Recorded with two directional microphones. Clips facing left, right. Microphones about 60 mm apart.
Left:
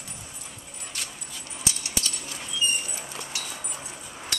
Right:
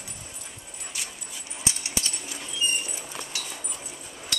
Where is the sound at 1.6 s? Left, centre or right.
Right.